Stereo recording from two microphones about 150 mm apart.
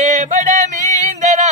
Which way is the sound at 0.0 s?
55° right (ahead or behind).